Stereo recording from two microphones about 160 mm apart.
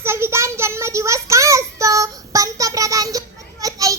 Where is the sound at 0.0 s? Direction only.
15° right (ahead or behind).